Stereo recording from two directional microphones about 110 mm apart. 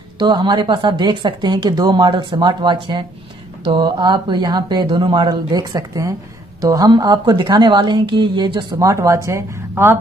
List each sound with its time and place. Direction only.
0.2 s a woman's voice: 45° right (ahead or behind); by 9.9 s 25° right (ahead or behind)